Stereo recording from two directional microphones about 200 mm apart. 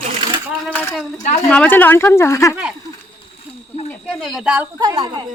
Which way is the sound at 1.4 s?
5° left (ahead or behind).